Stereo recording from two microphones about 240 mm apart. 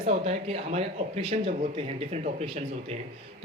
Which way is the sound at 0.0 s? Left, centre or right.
Right.